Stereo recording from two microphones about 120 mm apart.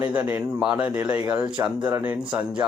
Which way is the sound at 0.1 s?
15° right (ahead or behind).